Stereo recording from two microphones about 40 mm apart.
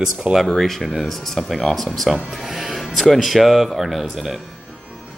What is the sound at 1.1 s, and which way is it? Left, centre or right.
Speech, centre.